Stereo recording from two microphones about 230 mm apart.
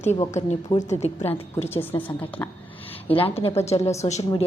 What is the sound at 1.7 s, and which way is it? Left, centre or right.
Speech, centre.